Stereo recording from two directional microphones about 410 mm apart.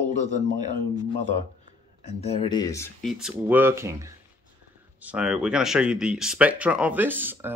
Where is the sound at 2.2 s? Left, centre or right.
Centre.